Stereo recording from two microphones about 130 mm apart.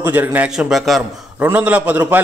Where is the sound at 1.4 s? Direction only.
15° right (ahead or behind).